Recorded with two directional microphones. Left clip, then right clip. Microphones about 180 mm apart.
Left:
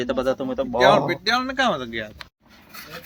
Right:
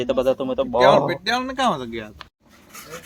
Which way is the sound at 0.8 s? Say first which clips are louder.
Right 1 dB; 35° right (ahead or behind).